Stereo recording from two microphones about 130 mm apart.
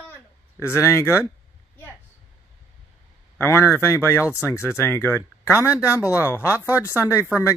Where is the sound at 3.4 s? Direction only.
20° left (ahead or behind).